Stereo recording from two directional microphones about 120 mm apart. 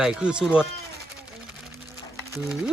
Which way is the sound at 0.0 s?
5° right (ahead or behind).